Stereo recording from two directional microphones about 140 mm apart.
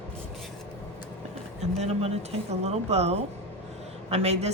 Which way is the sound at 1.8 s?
50° right (ahead or behind).